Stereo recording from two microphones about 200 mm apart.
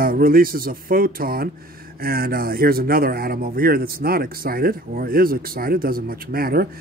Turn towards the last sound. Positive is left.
turn(degrees=-50)  # may be behind; listen again after turning